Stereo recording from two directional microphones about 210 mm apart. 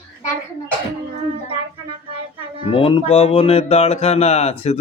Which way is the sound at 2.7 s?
25° left (ahead or behind).